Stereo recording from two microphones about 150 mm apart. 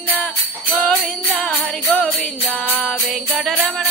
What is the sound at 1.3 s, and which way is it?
Music, 10° left (ahead or behind).